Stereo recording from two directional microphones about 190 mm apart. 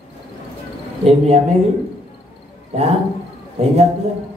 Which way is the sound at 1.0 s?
35° right (ahead or behind).